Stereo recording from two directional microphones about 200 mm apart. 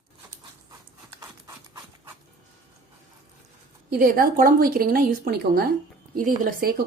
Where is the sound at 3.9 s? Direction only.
45° right (ahead or behind).